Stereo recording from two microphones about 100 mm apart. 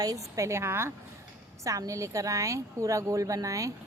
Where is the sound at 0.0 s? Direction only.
35° right (ahead or behind).